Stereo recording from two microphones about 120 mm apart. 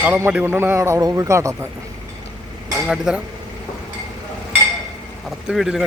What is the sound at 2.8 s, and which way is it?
Speech, 5° right (ahead or behind).